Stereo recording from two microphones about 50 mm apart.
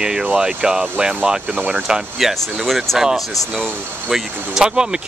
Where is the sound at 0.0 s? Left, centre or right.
Centre.